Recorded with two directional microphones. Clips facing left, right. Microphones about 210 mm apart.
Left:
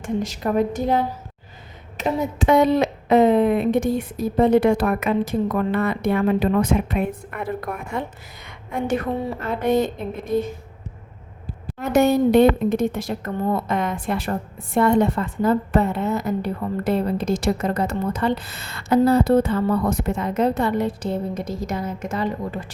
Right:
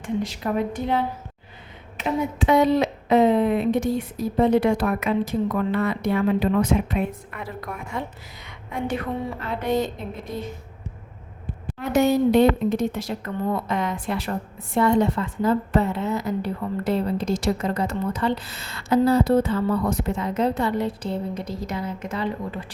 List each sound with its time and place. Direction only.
0.0 s a woman's voice: 45° left (ahead or behind)
9.5 s speech: 50° left (ahead or behind)
11.8 s speech: 50° left (ahead or behind)